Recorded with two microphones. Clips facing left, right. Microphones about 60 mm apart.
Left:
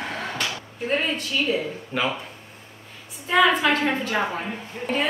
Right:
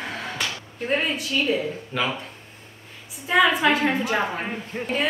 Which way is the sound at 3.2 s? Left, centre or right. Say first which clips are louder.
Even; centre.